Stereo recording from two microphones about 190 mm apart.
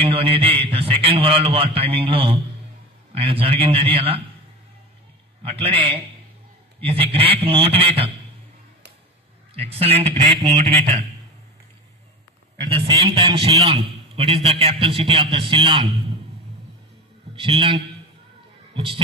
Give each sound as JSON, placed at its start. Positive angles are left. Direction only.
{"t": 0.0, "sound": "a man's voice", "side_deg": -30}
{"t": 5.4, "sound": "a man's voice", "side_deg": -30}
{"t": 9.5, "sound": "a man's voice", "side_deg": -30}
{"t": 12.6, "sound": "a man's voice", "side_deg": -30}
{"t": 17.4, "sound": "a man's voice", "side_deg": -30}
{"t": 18.7, "sound": "a sound", "side_deg": -25}